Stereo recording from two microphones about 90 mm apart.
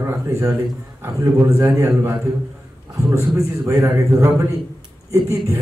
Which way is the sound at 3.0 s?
35° right (ahead or behind).